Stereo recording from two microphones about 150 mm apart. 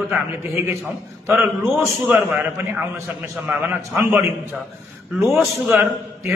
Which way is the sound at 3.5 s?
10° right (ahead or behind).